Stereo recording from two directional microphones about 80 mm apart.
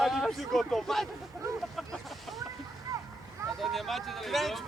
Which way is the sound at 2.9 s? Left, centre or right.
Right.